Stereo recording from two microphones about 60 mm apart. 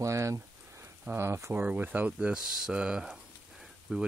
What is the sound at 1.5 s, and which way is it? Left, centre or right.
Speech, right.